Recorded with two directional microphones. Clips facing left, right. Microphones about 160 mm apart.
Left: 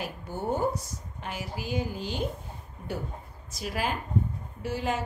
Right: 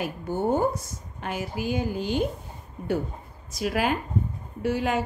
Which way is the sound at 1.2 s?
55° right (ahead or behind).